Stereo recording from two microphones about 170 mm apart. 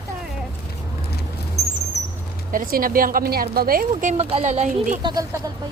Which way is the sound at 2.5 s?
55° right (ahead or behind).